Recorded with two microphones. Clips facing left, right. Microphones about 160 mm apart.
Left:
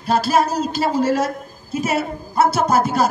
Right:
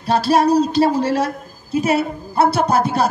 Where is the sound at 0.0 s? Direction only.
35° right (ahead or behind).